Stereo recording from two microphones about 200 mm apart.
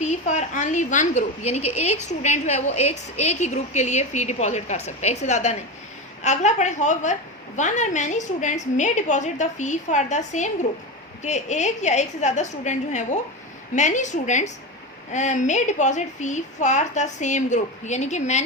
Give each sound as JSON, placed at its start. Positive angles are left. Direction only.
{"t": 0.0, "sound": "a woman's voice", "side_deg": 35}